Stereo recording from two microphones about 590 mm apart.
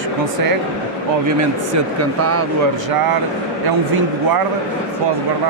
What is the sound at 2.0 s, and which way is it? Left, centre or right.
Speech, right.